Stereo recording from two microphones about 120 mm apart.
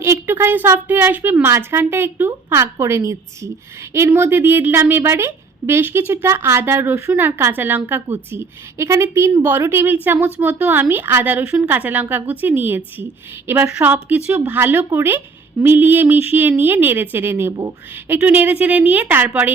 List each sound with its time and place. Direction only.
0.0 s a woman's voice: 20° right (ahead or behind)